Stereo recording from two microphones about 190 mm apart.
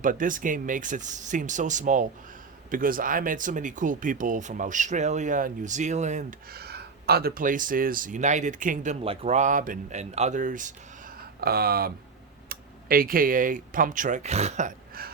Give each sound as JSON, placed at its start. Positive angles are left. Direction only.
{"t": 0.0, "sound": "speech", "side_deg": -45}
{"t": 6.5, "sound": "speech", "side_deg": -55}
{"t": 11.3, "sound": "speech", "side_deg": -55}